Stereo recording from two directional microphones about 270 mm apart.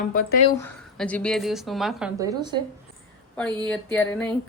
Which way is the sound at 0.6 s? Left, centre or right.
Centre.